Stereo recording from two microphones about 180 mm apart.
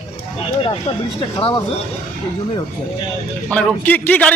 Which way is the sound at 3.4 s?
10° left (ahead or behind).